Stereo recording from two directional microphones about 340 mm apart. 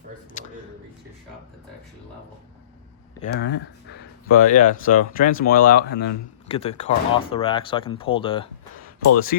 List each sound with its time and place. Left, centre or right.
3.2 s speech: left